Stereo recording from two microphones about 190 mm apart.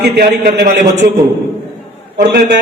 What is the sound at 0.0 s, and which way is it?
Speech, 60° right (ahead or behind).